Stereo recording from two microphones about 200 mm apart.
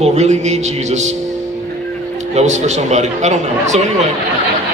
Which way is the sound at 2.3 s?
35° right (ahead or behind).